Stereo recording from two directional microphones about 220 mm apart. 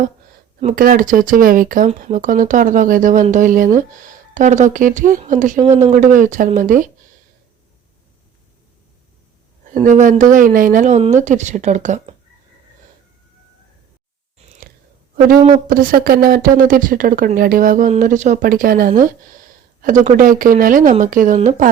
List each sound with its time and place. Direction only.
0.6 s speech: 35° right (ahead or behind)
9.7 s speech: 35° right (ahead or behind)
15.5 s speech: 40° right (ahead or behind)